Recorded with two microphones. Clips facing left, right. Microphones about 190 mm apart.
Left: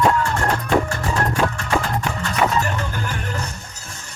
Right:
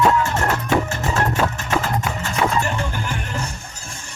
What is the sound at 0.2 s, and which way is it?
Music, 25° right (ahead or behind).